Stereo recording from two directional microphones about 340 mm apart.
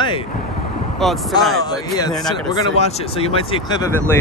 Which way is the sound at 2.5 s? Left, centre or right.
Centre.